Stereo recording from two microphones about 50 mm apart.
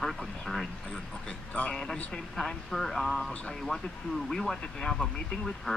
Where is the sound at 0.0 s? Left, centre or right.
Centre.